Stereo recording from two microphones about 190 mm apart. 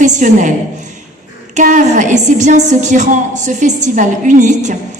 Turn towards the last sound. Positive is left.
turn(degrees=-40)  # may be behind; listen again after turning